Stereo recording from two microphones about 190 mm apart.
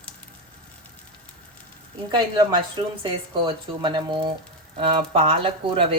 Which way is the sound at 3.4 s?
25° right (ahead or behind).